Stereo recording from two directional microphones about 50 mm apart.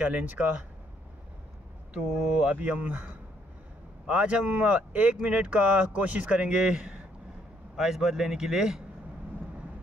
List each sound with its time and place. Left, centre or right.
0.0 s a man's voice: right
2.0 s a man's voice: right; by 8.8 s centre